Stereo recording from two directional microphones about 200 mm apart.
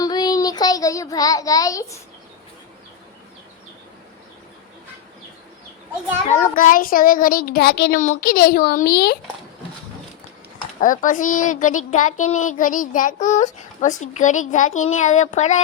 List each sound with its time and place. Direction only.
0.0 s child singing: 20° left (ahead or behind)
6.2 s a child's voice: 40° left (ahead or behind)
10.8 s a child's voice: 40° left (ahead or behind)